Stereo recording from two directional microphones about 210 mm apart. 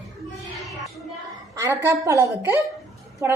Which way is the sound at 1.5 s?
15° right (ahead or behind).